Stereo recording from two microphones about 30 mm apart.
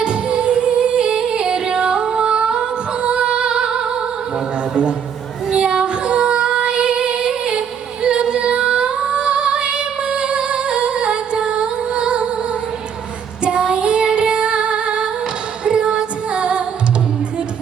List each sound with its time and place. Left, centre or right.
0.0 s music: right
5.5 s child singing: right
8.0 s female singing: right
13.4 s child singing: right
14.1 s music: right